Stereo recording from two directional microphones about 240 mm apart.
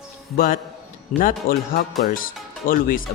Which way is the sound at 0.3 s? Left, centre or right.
Left.